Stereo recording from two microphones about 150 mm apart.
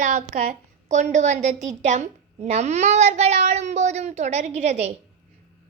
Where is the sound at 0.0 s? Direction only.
50° right (ahead or behind).